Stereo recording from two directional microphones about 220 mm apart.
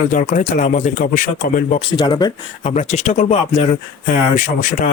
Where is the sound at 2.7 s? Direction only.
30° left (ahead or behind).